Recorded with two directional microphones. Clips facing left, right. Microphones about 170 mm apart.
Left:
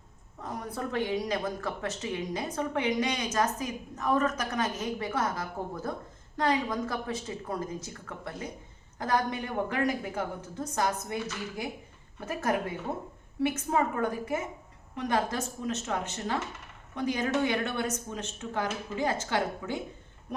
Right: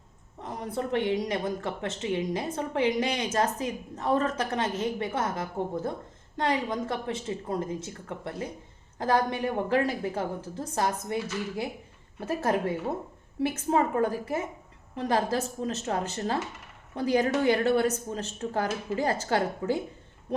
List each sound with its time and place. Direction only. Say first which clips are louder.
0.4 s speech: right 3 dB; 25° right (ahead or behind)